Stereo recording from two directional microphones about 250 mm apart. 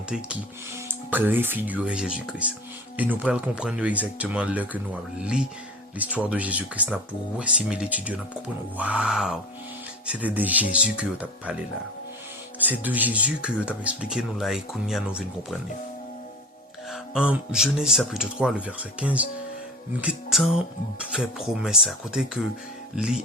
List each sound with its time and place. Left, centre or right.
1.1 s speech: centre
12.5 s speech: centre
16.9 s speech: centre